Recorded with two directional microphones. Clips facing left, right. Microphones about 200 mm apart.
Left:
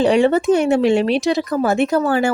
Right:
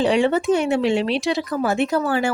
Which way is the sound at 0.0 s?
45° left (ahead or behind).